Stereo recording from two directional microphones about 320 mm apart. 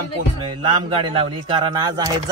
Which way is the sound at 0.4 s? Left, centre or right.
Centre.